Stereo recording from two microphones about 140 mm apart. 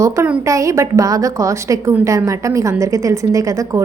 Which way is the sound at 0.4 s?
25° right (ahead or behind).